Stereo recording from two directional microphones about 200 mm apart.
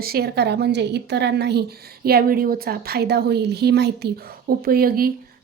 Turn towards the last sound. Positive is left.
turn(degrees=-50)  # may be behind; listen again after turning